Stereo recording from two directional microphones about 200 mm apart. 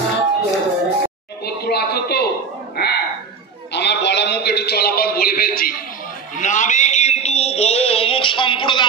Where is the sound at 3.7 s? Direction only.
60° left (ahead or behind); by 8.9 s 25° left (ahead or behind).